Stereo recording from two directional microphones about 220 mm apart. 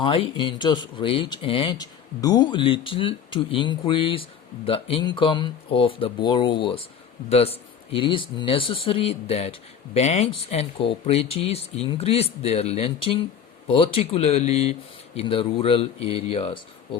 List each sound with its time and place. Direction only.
0.0 s speech: 25° left (ahead or behind)